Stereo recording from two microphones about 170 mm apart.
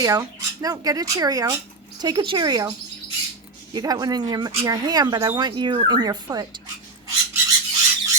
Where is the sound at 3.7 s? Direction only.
20° right (ahead or behind).